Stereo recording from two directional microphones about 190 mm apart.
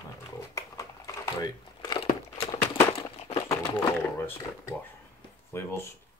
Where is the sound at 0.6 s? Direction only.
15° left (ahead or behind).